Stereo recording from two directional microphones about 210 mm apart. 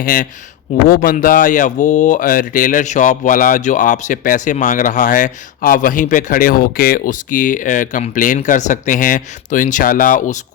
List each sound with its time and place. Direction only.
0.0 s speech: 40° left (ahead or behind)